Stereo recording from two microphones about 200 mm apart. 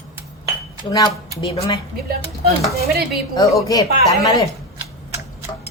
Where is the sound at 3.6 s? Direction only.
15° left (ahead or behind).